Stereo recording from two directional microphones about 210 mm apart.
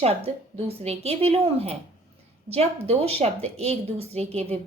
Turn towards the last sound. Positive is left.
turn(degrees=-30)  # may be behind; listen again after turning